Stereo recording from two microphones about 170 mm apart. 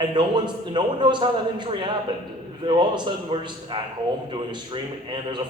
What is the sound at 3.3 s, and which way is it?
Speech, 30° right (ahead or behind).